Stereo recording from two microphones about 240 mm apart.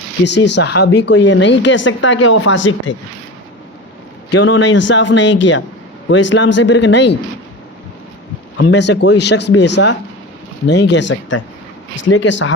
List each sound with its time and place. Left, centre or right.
0.3 s speech: left
4.3 s speech: left
8.5 s speech: left